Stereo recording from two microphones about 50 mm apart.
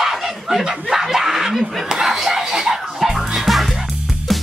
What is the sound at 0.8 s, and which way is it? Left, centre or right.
Snicker, centre.